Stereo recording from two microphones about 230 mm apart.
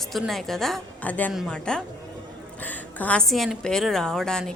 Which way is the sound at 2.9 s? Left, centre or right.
Centre.